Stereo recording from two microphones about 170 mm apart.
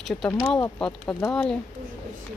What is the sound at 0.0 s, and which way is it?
Speech, 5° left (ahead or behind).